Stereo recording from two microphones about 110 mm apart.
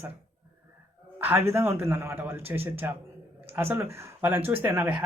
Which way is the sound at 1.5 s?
20° right (ahead or behind).